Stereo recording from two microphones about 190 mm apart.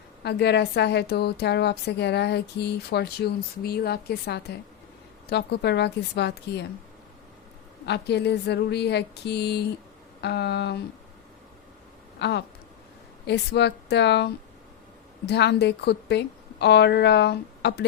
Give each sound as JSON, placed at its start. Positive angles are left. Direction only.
{"t": 0.2, "sound": "a woman's voice", "side_deg": 60}
{"t": 7.9, "sound": "a woman's voice", "side_deg": 60}
{"t": 12.2, "sound": "a woman's voice", "side_deg": 65}
{"t": 15.3, "sound": "a woman's voice", "side_deg": 60}